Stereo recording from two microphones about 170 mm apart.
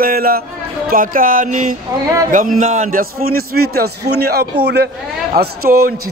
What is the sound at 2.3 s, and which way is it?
Speech, 50° right (ahead or behind).